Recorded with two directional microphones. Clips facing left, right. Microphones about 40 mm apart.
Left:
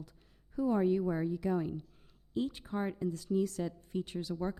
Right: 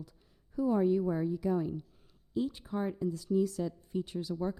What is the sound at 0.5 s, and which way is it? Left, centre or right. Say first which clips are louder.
Speech: right 2 dB; left.